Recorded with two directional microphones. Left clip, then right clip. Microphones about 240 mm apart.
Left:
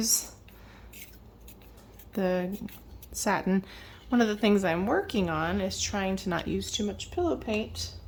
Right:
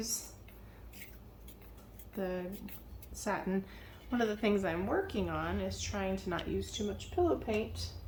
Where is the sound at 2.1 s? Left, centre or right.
Left.